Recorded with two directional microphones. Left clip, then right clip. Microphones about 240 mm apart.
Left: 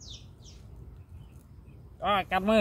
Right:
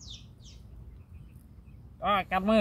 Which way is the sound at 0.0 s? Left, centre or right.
Right.